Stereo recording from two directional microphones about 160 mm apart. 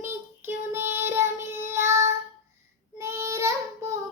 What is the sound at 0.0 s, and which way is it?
Child singing, 15° right (ahead or behind).